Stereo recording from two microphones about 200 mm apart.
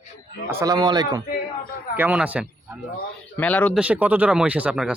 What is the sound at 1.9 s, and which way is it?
Speech, 5° right (ahead or behind).